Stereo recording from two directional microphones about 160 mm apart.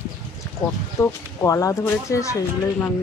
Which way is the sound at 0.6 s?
20° left (ahead or behind).